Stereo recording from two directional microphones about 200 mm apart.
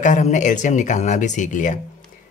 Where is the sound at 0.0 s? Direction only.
40° left (ahead or behind).